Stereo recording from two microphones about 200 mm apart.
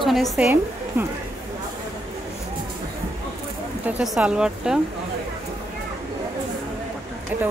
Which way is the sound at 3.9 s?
5° right (ahead or behind).